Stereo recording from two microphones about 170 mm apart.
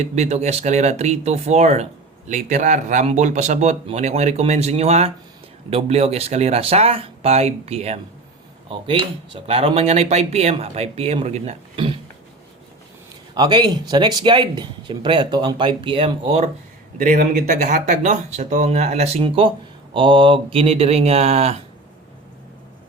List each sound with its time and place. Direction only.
0.0 s speech: 40° right (ahead or behind)
13.3 s speech: 25° right (ahead or behind)
17.0 s speech: 55° right (ahead or behind); by 21.6 s 35° right (ahead or behind)